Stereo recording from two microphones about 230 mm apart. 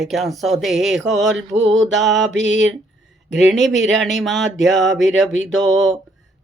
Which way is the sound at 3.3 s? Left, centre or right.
Centre.